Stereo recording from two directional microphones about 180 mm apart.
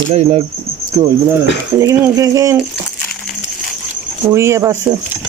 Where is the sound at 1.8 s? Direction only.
20° right (ahead or behind).